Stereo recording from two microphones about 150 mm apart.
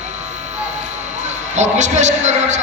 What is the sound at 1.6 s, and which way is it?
A man's voice, 50° right (ahead or behind).